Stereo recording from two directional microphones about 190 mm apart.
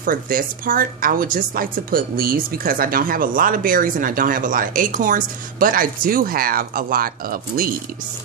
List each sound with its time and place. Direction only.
0.0 s a woman's voice: 50° right (ahead or behind)